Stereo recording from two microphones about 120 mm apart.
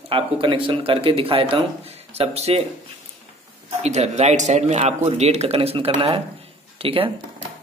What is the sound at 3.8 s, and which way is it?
Speech, 70° right (ahead or behind).